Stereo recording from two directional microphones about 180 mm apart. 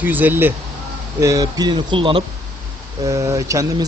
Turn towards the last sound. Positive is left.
turn(degrees=-20)  # may be behind; listen again after turning